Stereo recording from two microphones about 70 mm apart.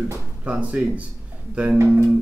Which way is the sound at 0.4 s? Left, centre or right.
Centre.